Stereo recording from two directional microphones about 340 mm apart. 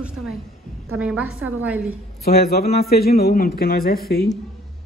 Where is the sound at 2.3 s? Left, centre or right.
Left.